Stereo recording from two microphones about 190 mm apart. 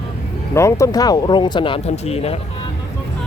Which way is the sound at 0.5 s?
15° left (ahead or behind).